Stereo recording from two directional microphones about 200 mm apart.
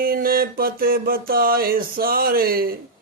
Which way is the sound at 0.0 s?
45° right (ahead or behind).